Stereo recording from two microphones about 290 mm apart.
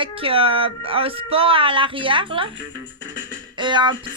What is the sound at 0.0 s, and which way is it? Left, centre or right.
Speech, centre.